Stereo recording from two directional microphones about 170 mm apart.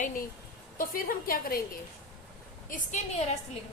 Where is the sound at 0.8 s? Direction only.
60° left (ahead or behind).